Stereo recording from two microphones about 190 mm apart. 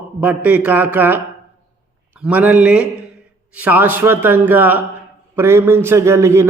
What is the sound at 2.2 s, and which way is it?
Speech, 10° right (ahead or behind).